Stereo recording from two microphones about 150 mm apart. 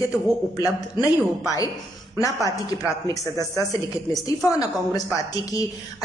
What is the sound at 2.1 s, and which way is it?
Speech, 25° left (ahead or behind).